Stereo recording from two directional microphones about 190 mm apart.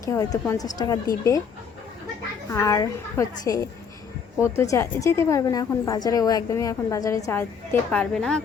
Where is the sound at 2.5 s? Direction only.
15° left (ahead or behind).